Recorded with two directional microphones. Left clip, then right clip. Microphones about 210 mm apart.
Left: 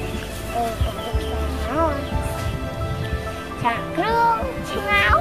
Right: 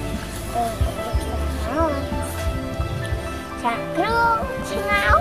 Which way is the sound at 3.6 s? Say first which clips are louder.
Even; centre (ahead or behind).